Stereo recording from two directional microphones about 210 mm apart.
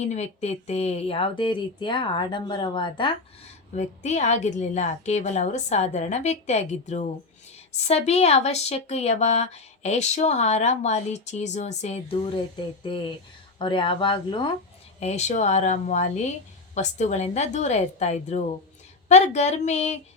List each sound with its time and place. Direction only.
0.0 s speech: 35° left (ahead or behind)
13.6 s speech: 25° left (ahead or behind)
15.0 s speech: 35° left (ahead or behind)